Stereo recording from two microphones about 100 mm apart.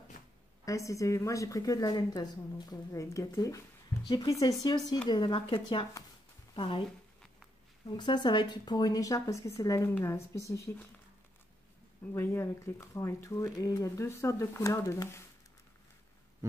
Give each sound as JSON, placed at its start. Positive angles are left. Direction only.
{"t": 0.7, "sound": "a woman's voice", "side_deg": 30}
{"t": 7.8, "sound": "speech", "side_deg": 50}
{"t": 12.1, "sound": "speech", "side_deg": 25}